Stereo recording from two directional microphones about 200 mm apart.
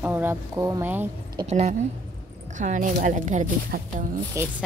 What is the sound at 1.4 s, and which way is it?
Speech, 30° right (ahead or behind).